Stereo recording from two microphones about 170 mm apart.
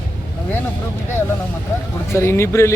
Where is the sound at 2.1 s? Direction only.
15° left (ahead or behind).